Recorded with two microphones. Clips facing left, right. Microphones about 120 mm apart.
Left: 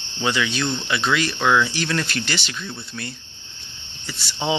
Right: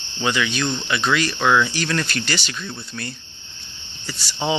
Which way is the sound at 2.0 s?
20° left (ahead or behind).